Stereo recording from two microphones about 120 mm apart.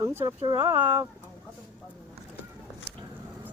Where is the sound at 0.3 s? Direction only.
35° right (ahead or behind).